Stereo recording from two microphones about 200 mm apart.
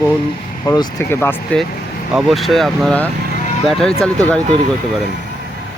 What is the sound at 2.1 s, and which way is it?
Speech, centre (ahead or behind).